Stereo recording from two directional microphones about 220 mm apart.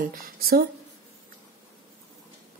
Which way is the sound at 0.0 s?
40° right (ahead or behind).